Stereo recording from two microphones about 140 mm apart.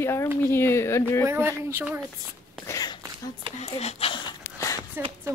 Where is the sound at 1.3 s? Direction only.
20° right (ahead or behind).